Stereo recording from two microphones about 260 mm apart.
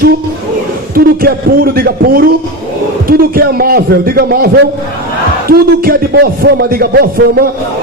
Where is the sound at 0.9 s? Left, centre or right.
Right.